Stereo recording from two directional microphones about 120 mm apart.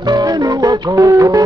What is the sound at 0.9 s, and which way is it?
Music, 30° right (ahead or behind).